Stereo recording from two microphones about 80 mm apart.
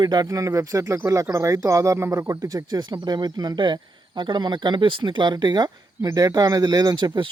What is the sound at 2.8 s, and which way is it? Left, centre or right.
Speech, right.